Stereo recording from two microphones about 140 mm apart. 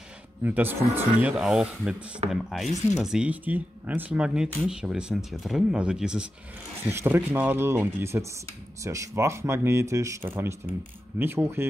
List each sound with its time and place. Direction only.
0.4 s speech: 15° right (ahead or behind)
2.2 s speech: 50° right (ahead or behind)
2.9 s speech: 5° right (ahead or behind)